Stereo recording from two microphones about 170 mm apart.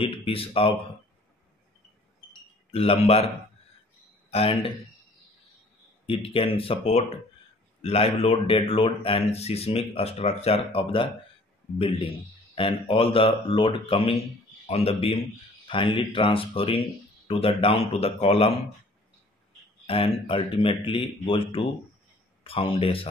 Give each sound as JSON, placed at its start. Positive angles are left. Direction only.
{"t": 0.0, "sound": "speech", "side_deg": 35}
{"t": 2.7, "sound": "speech", "side_deg": 35}
{"t": 4.3, "sound": "speech", "side_deg": 35}
{"t": 6.0, "sound": "speech", "side_deg": 30}
{"t": 12.5, "sound": "speech", "side_deg": 30}
{"t": 19.9, "sound": "speech", "side_deg": 30}